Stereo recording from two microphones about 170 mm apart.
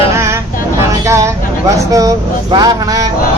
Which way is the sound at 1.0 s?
15° right (ahead or behind).